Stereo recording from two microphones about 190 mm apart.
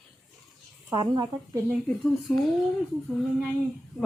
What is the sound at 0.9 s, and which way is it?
Speech, 20° right (ahead or behind).